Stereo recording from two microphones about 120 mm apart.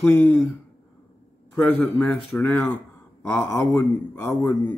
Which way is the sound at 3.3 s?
25° left (ahead or behind).